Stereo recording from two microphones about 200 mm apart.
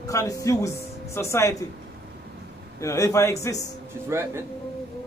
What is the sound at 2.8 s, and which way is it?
Speech, 15° left (ahead or behind).